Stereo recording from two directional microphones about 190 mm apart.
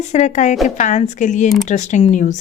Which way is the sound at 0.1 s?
40° left (ahead or behind).